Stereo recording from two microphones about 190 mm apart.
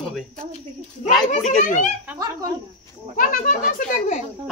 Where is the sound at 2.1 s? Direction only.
20° right (ahead or behind).